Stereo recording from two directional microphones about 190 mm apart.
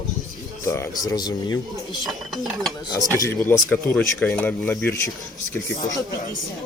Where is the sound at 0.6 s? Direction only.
15° left (ahead or behind).